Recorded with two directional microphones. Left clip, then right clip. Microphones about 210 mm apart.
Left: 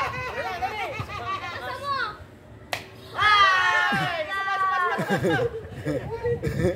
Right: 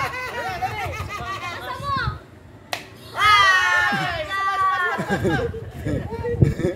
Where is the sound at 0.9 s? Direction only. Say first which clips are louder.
Right 1 dB; 35° right (ahead or behind).